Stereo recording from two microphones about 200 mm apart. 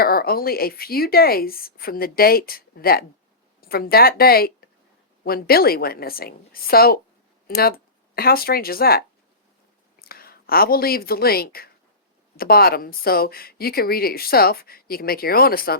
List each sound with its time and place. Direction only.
0.0 s a woman's voice: 50° left (ahead or behind)